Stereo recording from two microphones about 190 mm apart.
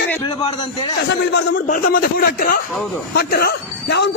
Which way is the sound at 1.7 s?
45° left (ahead or behind).